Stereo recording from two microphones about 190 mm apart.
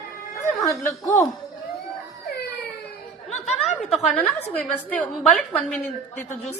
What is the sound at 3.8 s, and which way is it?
A woman's voice, centre (ahead or behind).